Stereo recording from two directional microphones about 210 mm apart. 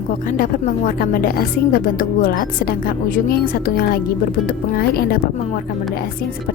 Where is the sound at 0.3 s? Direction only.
40° left (ahead or behind).